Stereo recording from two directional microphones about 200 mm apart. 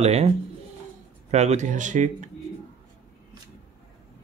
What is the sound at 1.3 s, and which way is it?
Speech, 35° right (ahead or behind).